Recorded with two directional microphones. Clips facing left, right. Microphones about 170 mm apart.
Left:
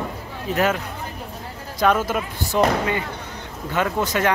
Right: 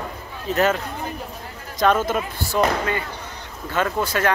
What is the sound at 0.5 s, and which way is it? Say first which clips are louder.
Speech: right 1 dB; 10° left (ahead or behind).